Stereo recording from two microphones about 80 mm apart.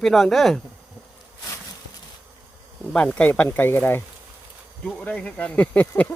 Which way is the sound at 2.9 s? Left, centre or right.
Centre.